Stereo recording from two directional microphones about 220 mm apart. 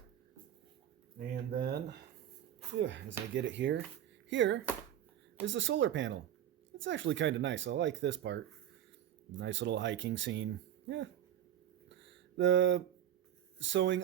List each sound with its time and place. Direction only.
1.3 s speech: 45° right (ahead or behind)
9.4 s speech: 55° right (ahead or behind)
11.9 s a sound: 55° right (ahead or behind)
13.6 s speech: 55° right (ahead or behind)